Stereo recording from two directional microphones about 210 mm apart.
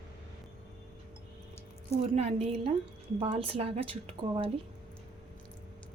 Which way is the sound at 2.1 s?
30° right (ahead or behind).